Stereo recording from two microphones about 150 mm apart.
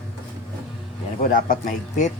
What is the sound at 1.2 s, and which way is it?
Speech, 70° left (ahead or behind).